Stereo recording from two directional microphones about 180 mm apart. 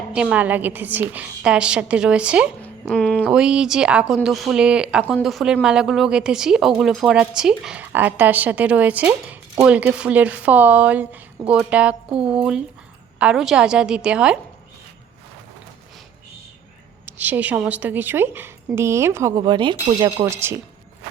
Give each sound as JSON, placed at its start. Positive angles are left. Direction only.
{"t": 0.1, "sound": "a woman's voice", "side_deg": -5}
{"t": 2.6, "sound": "speech", "side_deg": 5}
{"t": 3.2, "sound": "a woman's voice", "side_deg": -5}
{"t": 17.1, "sound": "a woman's voice", "side_deg": -10}
{"t": 19.4, "sound": "speech", "side_deg": -25}